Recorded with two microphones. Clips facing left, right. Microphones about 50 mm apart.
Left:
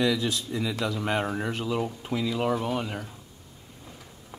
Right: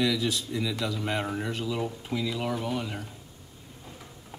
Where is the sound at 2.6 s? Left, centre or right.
Left.